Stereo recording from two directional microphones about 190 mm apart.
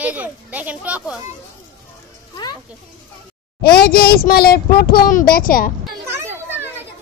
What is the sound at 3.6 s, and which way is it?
A child's voice, 55° left (ahead or behind).